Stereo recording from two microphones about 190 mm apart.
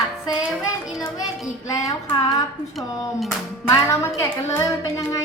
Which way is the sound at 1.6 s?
15° left (ahead or behind).